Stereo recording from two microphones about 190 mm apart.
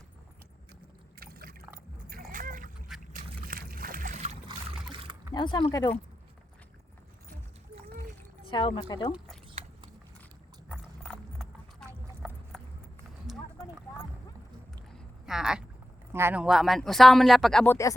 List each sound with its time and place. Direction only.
1.2 s liquid: 50° right (ahead or behind)
2.3 s duck: 45° right (ahead or behind)
3.1 s boat: 45° right (ahead or behind)
4.4 s boat: 25° right (ahead or behind)
5.3 s speech: 25° left (ahead or behind)
8.4 s speech: 25° left (ahead or behind)
10.7 s clip-clop: 5° left (ahead or behind)
13.3 s a sound: centre (ahead or behind)
14.9 s a sound: centre (ahead or behind)
16.1 s speech: 10° right (ahead or behind)